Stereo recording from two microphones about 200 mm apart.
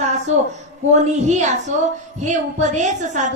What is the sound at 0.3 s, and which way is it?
Speech, 35° right (ahead or behind).